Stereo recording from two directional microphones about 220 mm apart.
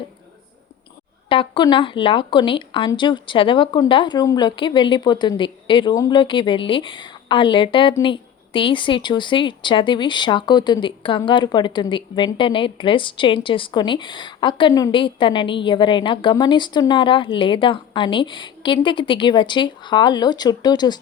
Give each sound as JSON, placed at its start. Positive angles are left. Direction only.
{"t": 1.3, "sound": "speech", "side_deg": 20}